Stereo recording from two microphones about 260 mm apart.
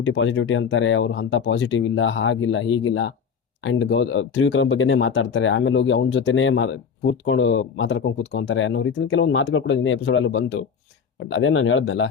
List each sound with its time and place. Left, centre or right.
0.0 s speech: left